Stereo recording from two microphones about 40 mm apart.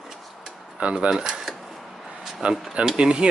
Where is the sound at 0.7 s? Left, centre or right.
Right.